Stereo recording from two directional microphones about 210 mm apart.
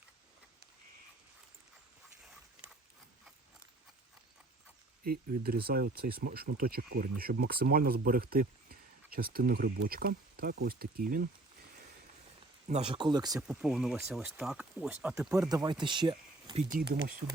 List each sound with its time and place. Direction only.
5.0 s speech: 45° right (ahead or behind)
12.6 s speech: 30° right (ahead or behind)
13.5 s speech: centre (ahead or behind)
15.4 s speech: 20° right (ahead or behind)